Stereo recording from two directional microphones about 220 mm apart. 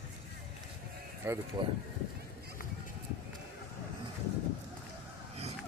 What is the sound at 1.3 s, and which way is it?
Speech, 10° right (ahead or behind).